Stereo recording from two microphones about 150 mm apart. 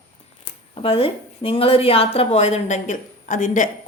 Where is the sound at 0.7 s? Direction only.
40° left (ahead or behind).